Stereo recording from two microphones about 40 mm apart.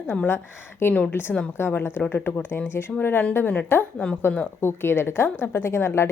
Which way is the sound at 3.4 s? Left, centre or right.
Left.